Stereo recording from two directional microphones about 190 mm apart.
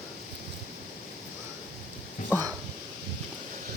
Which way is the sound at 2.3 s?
15° right (ahead or behind).